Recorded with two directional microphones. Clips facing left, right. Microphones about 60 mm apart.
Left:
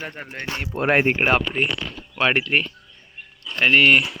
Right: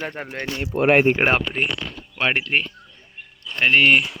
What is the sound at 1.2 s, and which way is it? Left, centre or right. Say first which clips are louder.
Speech: even; right.